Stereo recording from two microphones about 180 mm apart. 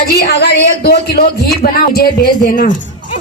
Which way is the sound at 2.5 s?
45° left (ahead or behind).